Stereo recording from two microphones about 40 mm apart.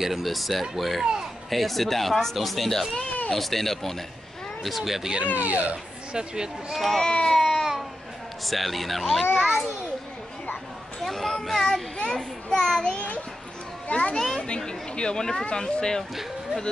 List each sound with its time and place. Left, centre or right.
0.0 s speech: centre
5.3 s speech: right
6.1 s speech: centre
7.0 s baby cry: centre
8.5 s speech: centre
9.2 s a child's voice: centre
11.0 s children playing: centre
12.0 s a sound: centre
12.9 s child singing: left
13.8 s a child's voice: left
14.7 s speech: left